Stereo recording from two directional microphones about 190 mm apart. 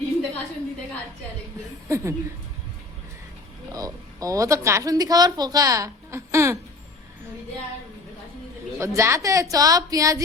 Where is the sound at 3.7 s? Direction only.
20° right (ahead or behind).